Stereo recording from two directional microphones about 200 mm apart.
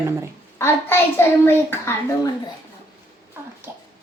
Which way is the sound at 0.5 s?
10° left (ahead or behind).